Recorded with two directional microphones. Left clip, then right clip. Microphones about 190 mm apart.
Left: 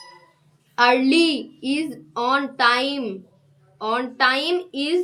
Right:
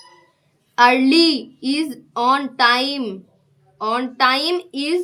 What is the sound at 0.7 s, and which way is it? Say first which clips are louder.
A woman's voice: right 3 dB; 30° right (ahead or behind).